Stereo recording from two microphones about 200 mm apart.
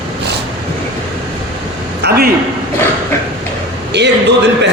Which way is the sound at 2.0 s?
60° right (ahead or behind).